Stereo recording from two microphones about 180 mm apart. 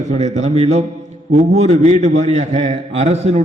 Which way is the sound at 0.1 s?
40° right (ahead or behind).